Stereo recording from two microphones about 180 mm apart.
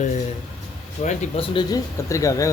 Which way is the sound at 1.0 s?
30° left (ahead or behind).